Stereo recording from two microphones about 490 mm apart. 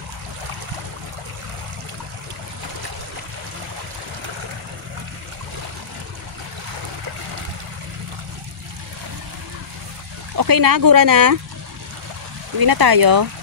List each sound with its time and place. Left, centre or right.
10.3 s speech: right
12.5 s speech: right